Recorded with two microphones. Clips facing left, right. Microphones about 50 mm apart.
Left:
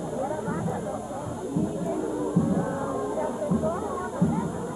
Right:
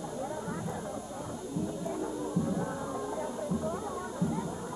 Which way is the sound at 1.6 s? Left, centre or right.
Centre.